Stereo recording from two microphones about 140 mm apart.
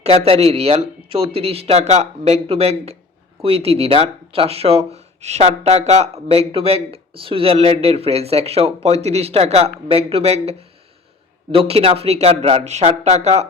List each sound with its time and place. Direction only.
0.0 s speech: 45° right (ahead or behind)